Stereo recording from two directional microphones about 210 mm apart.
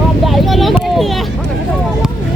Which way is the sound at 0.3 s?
Centre (ahead or behind).